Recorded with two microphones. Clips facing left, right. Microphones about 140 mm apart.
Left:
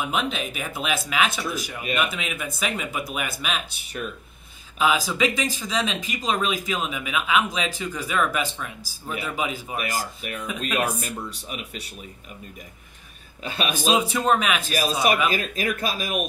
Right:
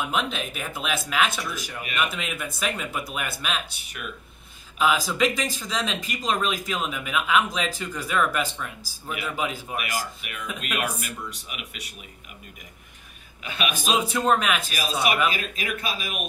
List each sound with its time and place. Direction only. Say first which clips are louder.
0.1 s speech: left 1 dB; 5° left (ahead or behind)
4.7 s a man's voice: even; 5° left (ahead or behind)
9.8 s a man's voice: left 2 dB; 35° left (ahead or behind)
13.4 s a man's voice: left 2 dB; 35° left (ahead or behind)
14.0 s speech: even; centre (ahead or behind)
14.7 s a man's voice: left 4 dB; 40° left (ahead or behind)